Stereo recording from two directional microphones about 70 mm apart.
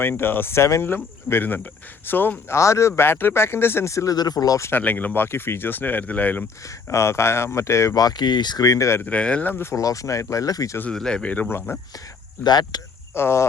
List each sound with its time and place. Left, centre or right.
0.0 s speech: left
2.6 s speech: left
3.9 s speech: left
4.7 s speech: left
6.8 s speech: left
7.9 s speech: left
9.0 s speech: centre
9.5 s speech: left
9.7 s speech: left
10.9 s speech: centre
11.5 s speech: left
12.4 s speech: left
13.1 s speech: left